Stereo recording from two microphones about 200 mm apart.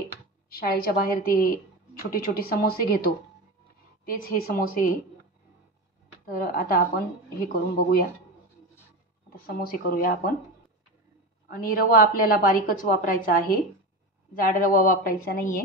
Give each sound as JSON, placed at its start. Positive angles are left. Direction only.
{"t": 0.5, "sound": "a woman's voice", "side_deg": 45}
{"t": 6.2, "sound": "a woman's voice", "side_deg": 50}
{"t": 9.3, "sound": "a woman's voice", "side_deg": 45}
{"t": 11.4, "sound": "a woman's voice", "side_deg": 45}